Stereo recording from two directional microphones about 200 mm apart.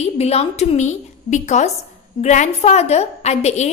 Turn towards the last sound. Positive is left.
turn(degrees=35)  # may be behind; listen again after turning